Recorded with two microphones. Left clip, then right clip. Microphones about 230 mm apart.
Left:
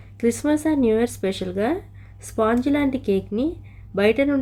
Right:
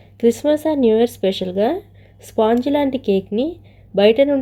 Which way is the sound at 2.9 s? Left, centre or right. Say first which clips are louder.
Right 4 dB; centre.